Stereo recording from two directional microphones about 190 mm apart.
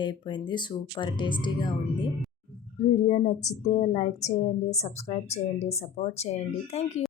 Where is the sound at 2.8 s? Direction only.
40° left (ahead or behind).